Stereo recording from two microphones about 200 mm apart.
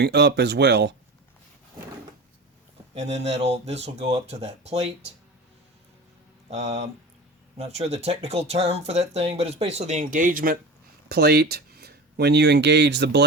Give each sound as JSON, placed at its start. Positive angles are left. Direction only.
{"t": 0.0, "sound": "speech", "side_deg": -55}
{"t": 2.9, "sound": "speech", "side_deg": -35}
{"t": 6.5, "sound": "speech", "side_deg": -35}